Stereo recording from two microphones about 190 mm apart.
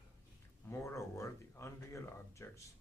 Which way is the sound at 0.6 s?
15° left (ahead or behind).